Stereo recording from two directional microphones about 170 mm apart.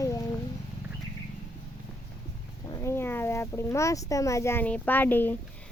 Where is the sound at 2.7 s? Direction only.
15° left (ahead or behind).